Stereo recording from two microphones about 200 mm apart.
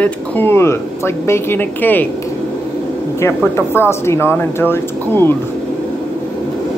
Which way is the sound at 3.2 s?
15° left (ahead or behind).